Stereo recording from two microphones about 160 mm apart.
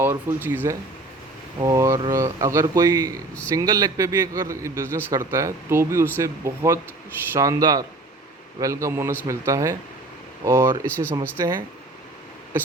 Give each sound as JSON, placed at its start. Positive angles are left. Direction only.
{"t": 0.0, "sound": "a man's voice", "side_deg": -15}
{"t": 10.8, "sound": "speech", "side_deg": 10}
{"t": 11.1, "sound": "a man's voice", "side_deg": -20}